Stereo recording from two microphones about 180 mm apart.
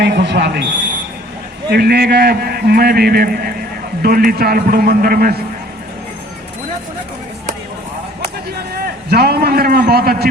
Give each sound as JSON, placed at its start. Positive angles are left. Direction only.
{"t": 0.0, "sound": "speech", "side_deg": -65}
{"t": 1.7, "sound": "a man's voice", "side_deg": -60}
{"t": 8.7, "sound": "a man's voice", "side_deg": -60}